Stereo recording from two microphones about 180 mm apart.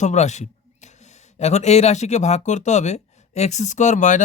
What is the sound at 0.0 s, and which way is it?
Speech, 40° left (ahead or behind).